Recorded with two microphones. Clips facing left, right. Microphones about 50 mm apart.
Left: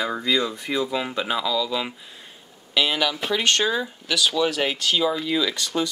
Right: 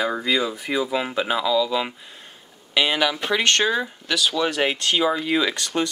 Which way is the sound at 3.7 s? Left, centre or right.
Centre.